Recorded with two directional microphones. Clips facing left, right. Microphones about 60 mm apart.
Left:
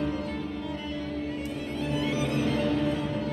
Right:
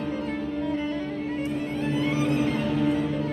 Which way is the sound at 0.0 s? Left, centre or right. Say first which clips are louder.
Right 2 dB; right.